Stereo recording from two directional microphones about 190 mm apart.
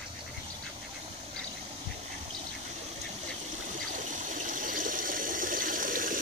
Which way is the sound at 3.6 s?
40° right (ahead or behind).